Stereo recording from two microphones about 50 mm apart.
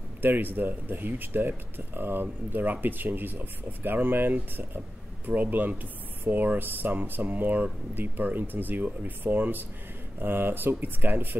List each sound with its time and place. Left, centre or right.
0.2 s speech: right